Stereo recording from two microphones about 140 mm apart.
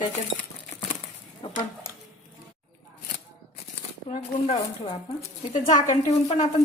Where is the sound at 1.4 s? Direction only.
40° left (ahead or behind).